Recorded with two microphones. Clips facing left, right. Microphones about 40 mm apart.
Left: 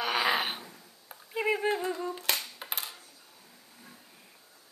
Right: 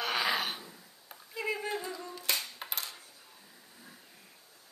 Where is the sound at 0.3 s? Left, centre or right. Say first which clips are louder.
Left 3 dB; left.